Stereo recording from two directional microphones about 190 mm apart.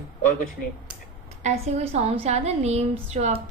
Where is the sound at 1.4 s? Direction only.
35° right (ahead or behind).